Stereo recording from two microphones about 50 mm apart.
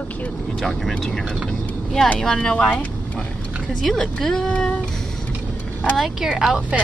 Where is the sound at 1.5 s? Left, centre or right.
Centre.